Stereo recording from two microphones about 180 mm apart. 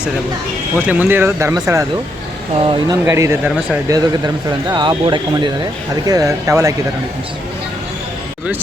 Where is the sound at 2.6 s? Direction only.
20° right (ahead or behind).